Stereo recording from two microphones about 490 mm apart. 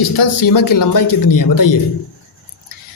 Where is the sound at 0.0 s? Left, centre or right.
Left.